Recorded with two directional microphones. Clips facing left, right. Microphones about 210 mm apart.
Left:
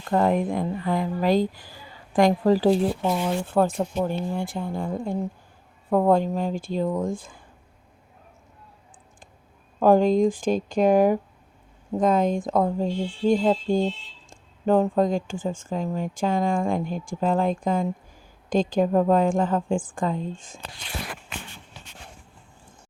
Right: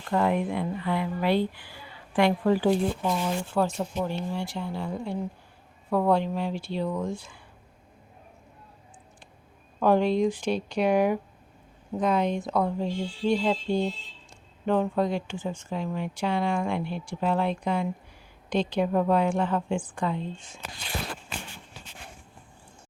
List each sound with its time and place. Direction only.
0.1 s speech: 40° left (ahead or behind)
3.4 s speech: 55° left (ahead or behind)
9.8 s speech: 45° left (ahead or behind)